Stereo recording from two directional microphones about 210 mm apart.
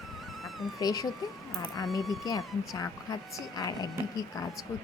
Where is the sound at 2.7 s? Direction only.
15° left (ahead or behind).